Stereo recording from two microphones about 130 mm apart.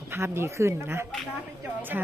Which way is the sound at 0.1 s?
20° right (ahead or behind).